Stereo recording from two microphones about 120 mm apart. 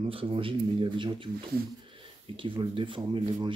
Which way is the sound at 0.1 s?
50° right (ahead or behind).